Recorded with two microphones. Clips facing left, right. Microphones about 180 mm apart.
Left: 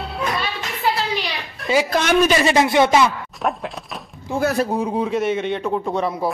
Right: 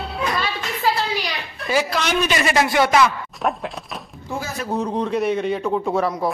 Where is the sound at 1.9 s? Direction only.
50° left (ahead or behind).